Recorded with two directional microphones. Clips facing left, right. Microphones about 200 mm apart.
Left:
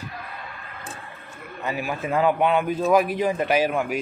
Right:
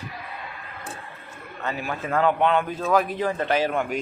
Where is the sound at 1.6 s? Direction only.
10° left (ahead or behind).